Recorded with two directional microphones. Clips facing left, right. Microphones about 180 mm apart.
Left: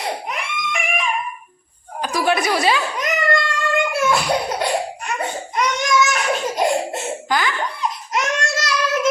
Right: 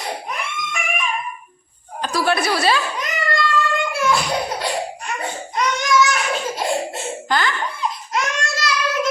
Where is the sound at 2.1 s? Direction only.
15° left (ahead or behind).